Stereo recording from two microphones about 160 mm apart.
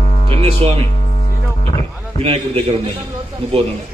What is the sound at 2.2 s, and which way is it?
Speech, 35° right (ahead or behind).